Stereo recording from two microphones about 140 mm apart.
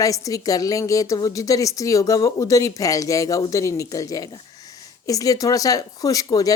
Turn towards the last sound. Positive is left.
turn(degrees=25)  # may be behind; listen again after turning